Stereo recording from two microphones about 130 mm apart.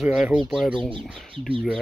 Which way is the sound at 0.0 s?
5° right (ahead or behind).